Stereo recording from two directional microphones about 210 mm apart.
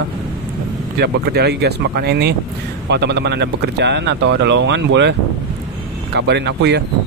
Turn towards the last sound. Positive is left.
turn(degrees=-55)  # may be behind; listen again after turning